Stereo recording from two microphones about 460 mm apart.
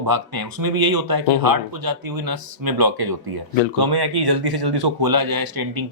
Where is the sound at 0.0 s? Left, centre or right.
Right.